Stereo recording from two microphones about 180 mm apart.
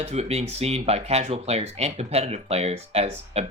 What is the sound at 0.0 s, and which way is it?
Speech, 35° right (ahead or behind).